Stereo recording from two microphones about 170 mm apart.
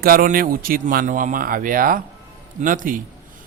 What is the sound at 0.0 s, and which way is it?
A man's voice, 60° right (ahead or behind).